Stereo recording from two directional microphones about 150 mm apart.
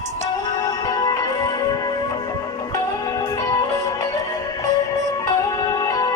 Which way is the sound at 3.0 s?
25° left (ahead or behind).